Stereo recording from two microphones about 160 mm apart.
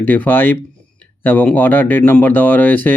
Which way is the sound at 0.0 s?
10° left (ahead or behind).